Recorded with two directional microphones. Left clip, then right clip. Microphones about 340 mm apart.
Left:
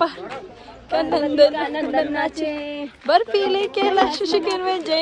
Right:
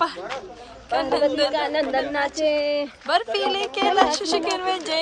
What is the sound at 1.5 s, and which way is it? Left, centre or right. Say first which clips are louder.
A woman's voice: even; centre.